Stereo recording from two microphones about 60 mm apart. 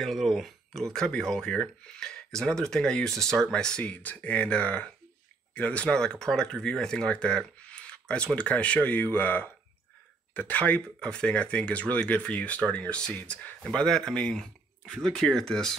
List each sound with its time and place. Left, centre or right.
0.0 s speech: centre; by 10.8 s left
11.0 s speech: centre
13.7 s speech: centre